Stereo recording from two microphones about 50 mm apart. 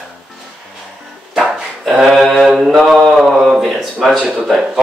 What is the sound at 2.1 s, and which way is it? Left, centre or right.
Mantra, centre.